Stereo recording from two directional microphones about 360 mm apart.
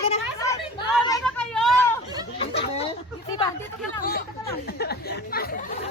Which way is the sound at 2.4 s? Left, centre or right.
Centre.